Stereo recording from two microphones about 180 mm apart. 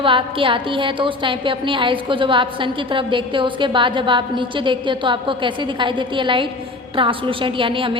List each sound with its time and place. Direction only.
0.0 s a woman's voice: 30° right (ahead or behind)